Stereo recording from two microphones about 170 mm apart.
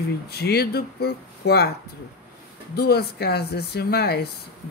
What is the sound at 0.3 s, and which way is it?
Speech, 70° left (ahead or behind).